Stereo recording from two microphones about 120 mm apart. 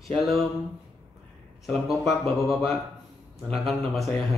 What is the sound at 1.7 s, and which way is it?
Speech, centre (ahead or behind).